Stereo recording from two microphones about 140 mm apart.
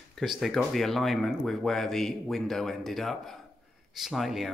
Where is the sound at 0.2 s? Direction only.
Centre (ahead or behind).